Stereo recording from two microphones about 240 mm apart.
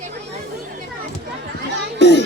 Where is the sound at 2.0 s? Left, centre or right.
Left.